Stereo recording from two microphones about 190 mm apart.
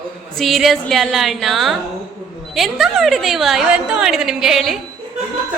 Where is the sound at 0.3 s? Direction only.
Centre (ahead or behind).